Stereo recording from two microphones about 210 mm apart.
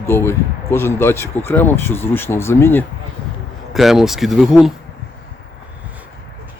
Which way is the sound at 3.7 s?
Centre (ahead or behind).